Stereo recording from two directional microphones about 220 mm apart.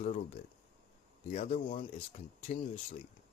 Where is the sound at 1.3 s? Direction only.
30° left (ahead or behind).